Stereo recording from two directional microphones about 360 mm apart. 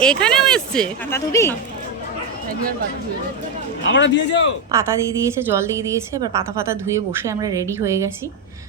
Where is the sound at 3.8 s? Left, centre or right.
Left.